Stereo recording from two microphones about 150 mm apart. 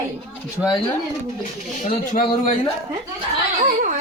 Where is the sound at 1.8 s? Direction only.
60° left (ahead or behind).